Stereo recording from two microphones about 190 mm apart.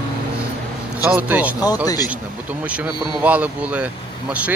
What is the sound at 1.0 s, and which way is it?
Speech, 10° right (ahead or behind).